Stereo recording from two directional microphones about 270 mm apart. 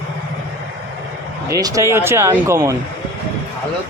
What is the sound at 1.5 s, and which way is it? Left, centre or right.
Speech, centre.